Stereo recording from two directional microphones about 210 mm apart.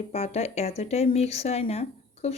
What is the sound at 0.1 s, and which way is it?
Speech, 30° left (ahead or behind).